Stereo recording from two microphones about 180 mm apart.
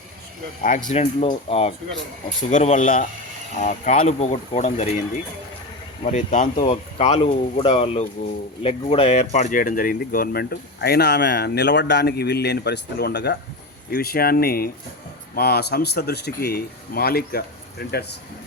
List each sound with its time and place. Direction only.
0.9 s speech: 35° left (ahead or behind)
2.5 s speech: 45° left (ahead or behind); by 18.0 s 60° left (ahead or behind)